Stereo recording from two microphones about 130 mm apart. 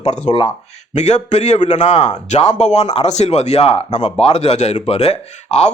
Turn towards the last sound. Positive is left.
turn(degrees=55)  # may be behind; listen again after turning